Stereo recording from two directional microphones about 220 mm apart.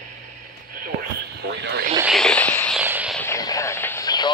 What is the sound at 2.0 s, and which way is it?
Radio, centre (ahead or behind).